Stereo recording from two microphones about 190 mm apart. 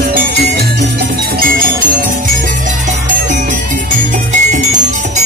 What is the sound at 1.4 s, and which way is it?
Music, 50° right (ahead or behind).